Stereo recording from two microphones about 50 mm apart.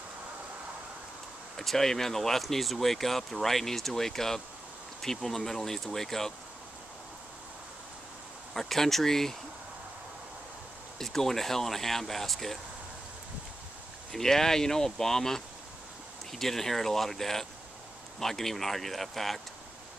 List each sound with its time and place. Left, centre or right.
1.6 s speech: centre
8.5 s speech: centre
11.0 s speech: centre
14.1 s speech: centre